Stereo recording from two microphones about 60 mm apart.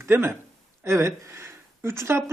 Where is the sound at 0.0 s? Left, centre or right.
Right.